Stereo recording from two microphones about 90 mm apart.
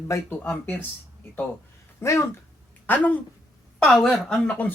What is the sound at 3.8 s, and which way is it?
Speech, 5° left (ahead or behind).